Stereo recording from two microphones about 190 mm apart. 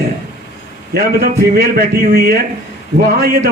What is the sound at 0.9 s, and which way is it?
A man's voice, 60° right (ahead or behind).